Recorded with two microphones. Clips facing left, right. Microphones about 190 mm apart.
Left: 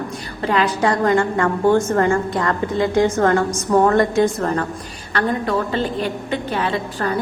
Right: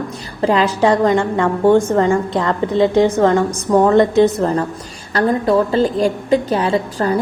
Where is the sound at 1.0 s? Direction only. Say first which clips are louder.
Right 2 dB; 20° right (ahead or behind).